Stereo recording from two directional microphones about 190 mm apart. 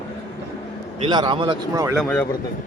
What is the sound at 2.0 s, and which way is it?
Speech, 10° left (ahead or behind).